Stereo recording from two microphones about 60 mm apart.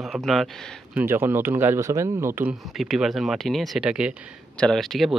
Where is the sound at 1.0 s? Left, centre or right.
Right.